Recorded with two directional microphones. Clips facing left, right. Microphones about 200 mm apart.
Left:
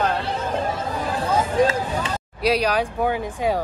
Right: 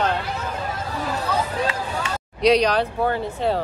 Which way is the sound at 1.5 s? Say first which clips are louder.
Left 5 dB; 45° left (ahead or behind).